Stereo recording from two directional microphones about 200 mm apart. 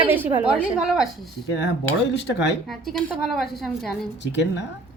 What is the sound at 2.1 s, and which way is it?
Speech, 60° left (ahead or behind).